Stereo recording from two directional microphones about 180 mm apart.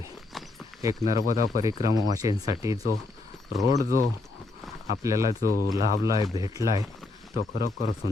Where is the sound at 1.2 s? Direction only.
45° left (ahead or behind).